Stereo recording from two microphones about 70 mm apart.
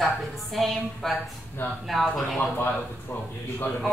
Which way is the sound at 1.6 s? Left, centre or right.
Left.